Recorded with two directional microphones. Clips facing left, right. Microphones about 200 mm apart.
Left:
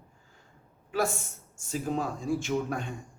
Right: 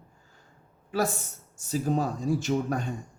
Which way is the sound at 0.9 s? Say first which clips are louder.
Right 1 dB; 40° right (ahead or behind).